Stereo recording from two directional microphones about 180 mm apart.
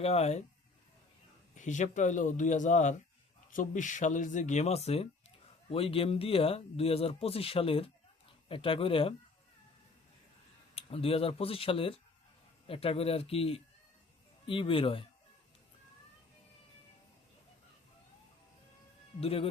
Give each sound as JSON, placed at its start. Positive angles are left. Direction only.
{"t": 0.0, "sound": "speech", "side_deg": 35}
{"t": 1.5, "sound": "speech", "side_deg": 40}
{"t": 10.8, "sound": "speech", "side_deg": 30}
{"t": 19.2, "sound": "speech", "side_deg": 30}